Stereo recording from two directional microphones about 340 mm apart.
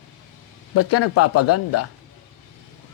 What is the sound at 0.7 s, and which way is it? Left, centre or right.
A man's voice, left.